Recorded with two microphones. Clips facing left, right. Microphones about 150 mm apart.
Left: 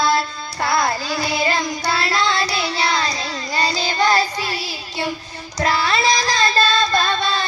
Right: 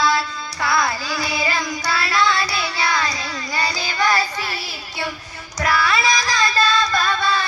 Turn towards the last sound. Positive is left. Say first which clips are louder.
# even
turn(degrees=25)  # may be behind; listen again after turning